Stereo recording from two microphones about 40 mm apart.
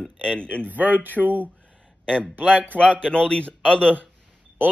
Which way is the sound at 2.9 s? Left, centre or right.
Left.